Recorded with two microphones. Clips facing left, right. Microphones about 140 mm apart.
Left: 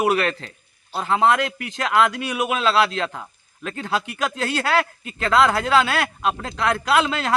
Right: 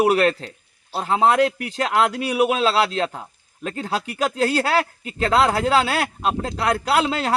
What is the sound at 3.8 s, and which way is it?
Speech, 35° right (ahead or behind).